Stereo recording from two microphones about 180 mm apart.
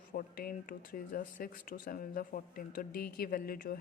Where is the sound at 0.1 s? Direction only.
50° left (ahead or behind).